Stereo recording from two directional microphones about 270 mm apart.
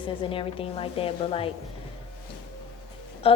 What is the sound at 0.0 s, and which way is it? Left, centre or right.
A woman's voice, centre.